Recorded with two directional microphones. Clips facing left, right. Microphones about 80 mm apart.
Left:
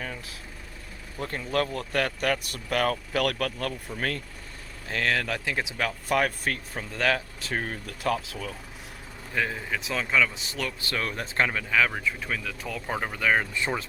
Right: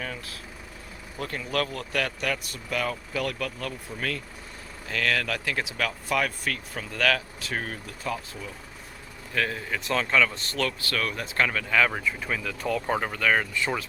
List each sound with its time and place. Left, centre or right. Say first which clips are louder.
1.2 s speech: left 1 dB; left
4.9 s speech: even; left
6.1 s speech: left 3 dB; left
7.9 s speech: left 4 dB; left
9.3 s speech: even; centre
10.8 s speech: right 1 dB; left
11.9 s speech: right 1 dB; centre
13.5 s speech: right 1 dB; left